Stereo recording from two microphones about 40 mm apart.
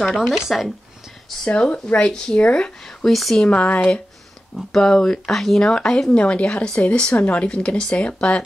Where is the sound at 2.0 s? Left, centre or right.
Left.